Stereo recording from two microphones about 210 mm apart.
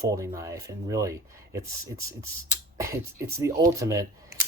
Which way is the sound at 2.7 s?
15° right (ahead or behind).